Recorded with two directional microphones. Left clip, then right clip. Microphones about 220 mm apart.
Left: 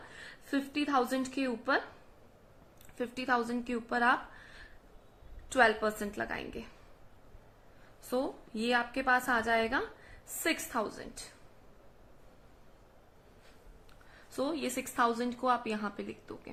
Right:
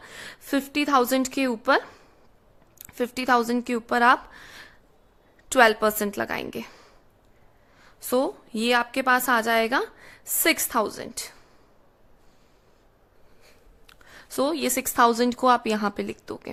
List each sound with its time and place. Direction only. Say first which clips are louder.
0.2 s a woman's voice: right 8 dB; 50° right (ahead or behind)
8.1 s a woman's voice: right 10 dB; 55° right (ahead or behind)
14.1 s a woman's voice: right 10 dB; 55° right (ahead or behind)